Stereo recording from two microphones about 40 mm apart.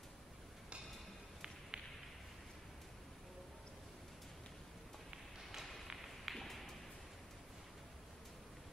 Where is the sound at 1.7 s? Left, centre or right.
Right.